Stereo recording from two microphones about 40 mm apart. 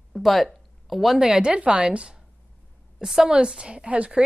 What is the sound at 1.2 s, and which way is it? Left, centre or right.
A woman's voice, right.